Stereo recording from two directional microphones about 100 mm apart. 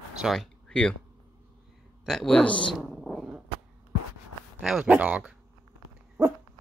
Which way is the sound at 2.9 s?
5° left (ahead or behind).